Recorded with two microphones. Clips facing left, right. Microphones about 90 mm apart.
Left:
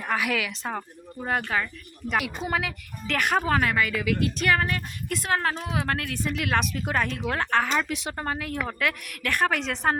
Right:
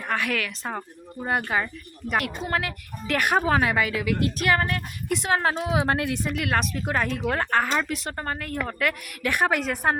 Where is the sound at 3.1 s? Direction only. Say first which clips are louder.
Right 2 dB; 10° right (ahead or behind).